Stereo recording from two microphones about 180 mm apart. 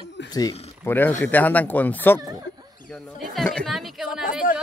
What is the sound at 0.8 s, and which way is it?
A woman's voice, 10° left (ahead or behind).